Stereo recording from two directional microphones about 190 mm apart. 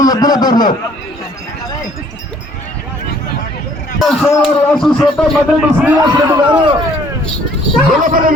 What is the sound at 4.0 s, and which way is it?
A man's voice, centre (ahead or behind).